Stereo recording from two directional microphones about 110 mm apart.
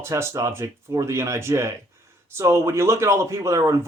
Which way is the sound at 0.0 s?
25° right (ahead or behind).